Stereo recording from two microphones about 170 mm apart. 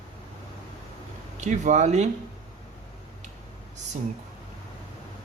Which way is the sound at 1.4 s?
45° right (ahead or behind).